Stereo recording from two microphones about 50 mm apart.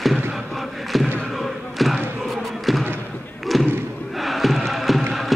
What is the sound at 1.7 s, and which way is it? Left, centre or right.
Basketball bounce, centre.